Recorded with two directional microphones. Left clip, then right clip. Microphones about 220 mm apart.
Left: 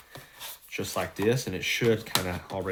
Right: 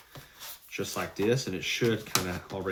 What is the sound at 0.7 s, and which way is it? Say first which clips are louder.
Speech: left 2 dB; 40° left (ahead or behind).